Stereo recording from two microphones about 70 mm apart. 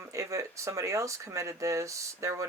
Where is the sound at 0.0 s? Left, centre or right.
Right.